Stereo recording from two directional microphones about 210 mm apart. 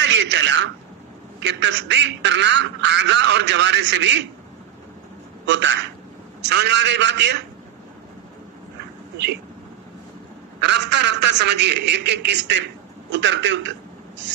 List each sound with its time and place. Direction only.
0.0 s speech: 60° right (ahead or behind)
1.4 s quack: 55° right (ahead or behind)
5.5 s quack: 60° right (ahead or behind)
10.6 s quack: 55° right (ahead or behind)
13.1 s a man's voice: 60° right (ahead or behind)